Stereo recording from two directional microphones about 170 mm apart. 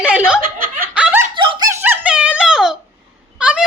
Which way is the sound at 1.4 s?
25° right (ahead or behind).